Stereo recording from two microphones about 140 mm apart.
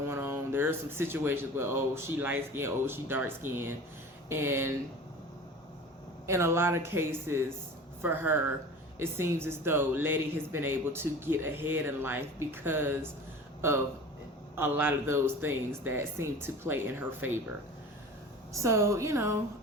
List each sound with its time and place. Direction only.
0.1 s a woman's voice: 15° right (ahead or behind)
6.2 s a woman's voice: 20° right (ahead or behind)
14.5 s a woman's voice: 15° right (ahead or behind)
18.5 s a woman's voice: 20° right (ahead or behind)